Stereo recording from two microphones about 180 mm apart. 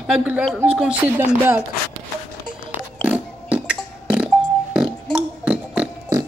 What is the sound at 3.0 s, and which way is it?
Music, 10° right (ahead or behind).